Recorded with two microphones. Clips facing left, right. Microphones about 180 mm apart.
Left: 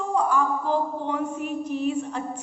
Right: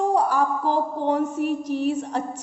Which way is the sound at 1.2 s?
85° right.